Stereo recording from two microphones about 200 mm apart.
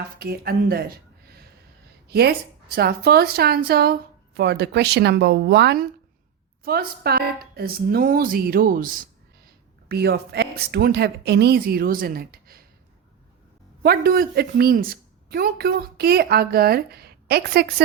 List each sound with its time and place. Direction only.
0.2 s speech: 50° right (ahead or behind)
2.0 s a woman's voice: 55° right (ahead or behind)
13.8 s speech: 50° right (ahead or behind)